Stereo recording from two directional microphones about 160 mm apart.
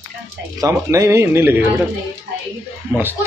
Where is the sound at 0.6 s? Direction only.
20° right (ahead or behind).